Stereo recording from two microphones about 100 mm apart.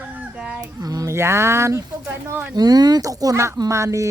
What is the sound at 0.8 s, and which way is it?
A woman's voice, 40° right (ahead or behind).